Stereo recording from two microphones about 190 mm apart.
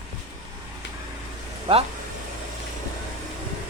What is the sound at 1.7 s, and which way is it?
Speech, 30° right (ahead or behind).